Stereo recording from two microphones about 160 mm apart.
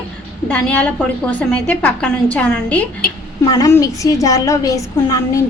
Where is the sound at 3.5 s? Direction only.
20° left (ahead or behind).